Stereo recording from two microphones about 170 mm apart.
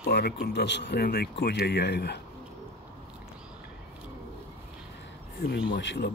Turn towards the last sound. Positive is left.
turn(degrees=90)